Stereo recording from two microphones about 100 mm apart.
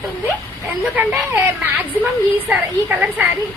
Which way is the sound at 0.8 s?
10° right (ahead or behind).